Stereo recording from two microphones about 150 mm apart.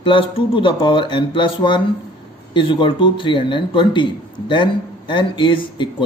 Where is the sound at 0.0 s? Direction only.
35° left (ahead or behind).